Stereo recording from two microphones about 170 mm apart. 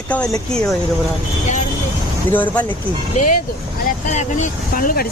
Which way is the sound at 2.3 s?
10° left (ahead or behind).